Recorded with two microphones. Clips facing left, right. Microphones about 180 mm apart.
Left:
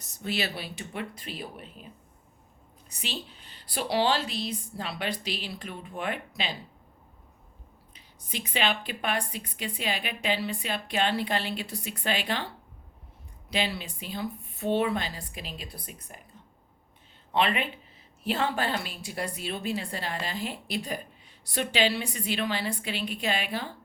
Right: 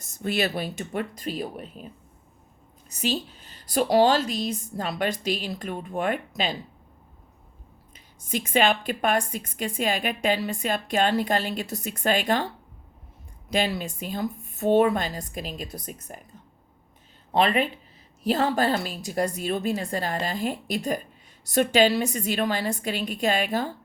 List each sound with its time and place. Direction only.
0.0 s a woman's voice: 50° right (ahead or behind)
2.9 s a woman's voice: 40° right (ahead or behind)
7.9 s a woman's voice: 45° right (ahead or behind)
13.5 s a woman's voice: 45° right (ahead or behind)
17.3 s a woman's voice: 40° right (ahead or behind)